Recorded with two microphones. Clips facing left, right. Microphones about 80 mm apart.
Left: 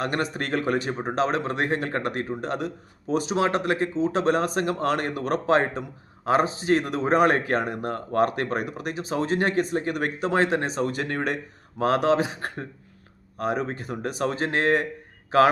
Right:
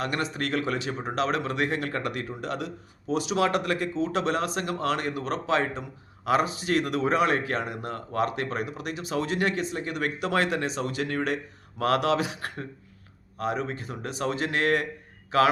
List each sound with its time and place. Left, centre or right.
0.0 s speech: left
6.2 s speech: left